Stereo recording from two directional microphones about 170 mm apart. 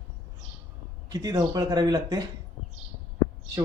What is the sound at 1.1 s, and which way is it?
Speech, 20° right (ahead or behind).